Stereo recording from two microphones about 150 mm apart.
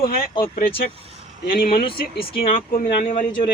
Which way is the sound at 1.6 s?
90° left.